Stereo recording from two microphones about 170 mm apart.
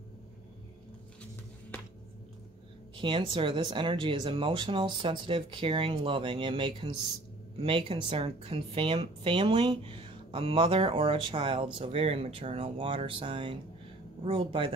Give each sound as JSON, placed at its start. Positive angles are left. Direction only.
{"t": 3.0, "sound": "speech", "side_deg": -30}